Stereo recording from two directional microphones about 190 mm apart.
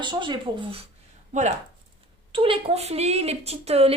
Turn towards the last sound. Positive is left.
turn(degrees=-30)  # may be behind; listen again after turning